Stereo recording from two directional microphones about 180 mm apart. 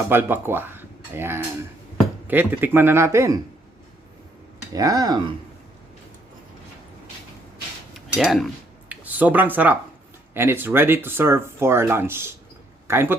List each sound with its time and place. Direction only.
0.1 s speech: 10° right (ahead or behind)
4.7 s speech: 20° right (ahead or behind)
8.1 s speech: centre (ahead or behind)